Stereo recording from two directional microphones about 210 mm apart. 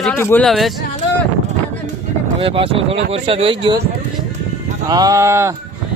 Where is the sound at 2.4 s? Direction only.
25° right (ahead or behind).